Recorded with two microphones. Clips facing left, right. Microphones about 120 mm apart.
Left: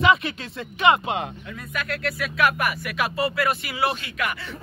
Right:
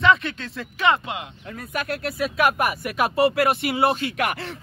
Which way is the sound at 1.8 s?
35° right (ahead or behind).